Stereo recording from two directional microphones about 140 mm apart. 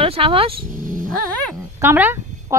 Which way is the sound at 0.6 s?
70° right (ahead or behind).